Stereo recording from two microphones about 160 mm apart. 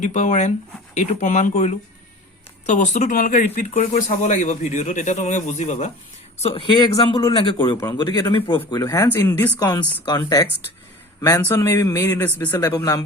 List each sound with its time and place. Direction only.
0.0 s speech: 50° left (ahead or behind)
6.4 s speech: 35° left (ahead or behind)
8.8 s speech: 15° left (ahead or behind)
11.3 s speech: 15° left (ahead or behind)